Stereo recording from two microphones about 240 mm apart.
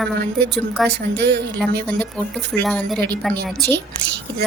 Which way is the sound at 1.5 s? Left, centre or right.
Centre.